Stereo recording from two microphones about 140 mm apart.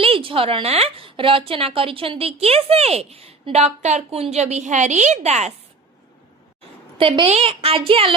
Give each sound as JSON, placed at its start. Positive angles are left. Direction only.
{"t": 0.0, "sound": "a woman's voice", "side_deg": -40}
{"t": 7.0, "sound": "a woman's voice", "side_deg": -45}